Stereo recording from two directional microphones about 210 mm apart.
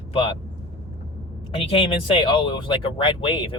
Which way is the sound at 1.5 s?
25° left (ahead or behind).